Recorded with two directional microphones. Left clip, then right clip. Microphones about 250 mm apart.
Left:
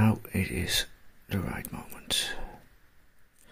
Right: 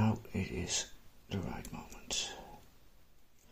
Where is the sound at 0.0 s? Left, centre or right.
Left.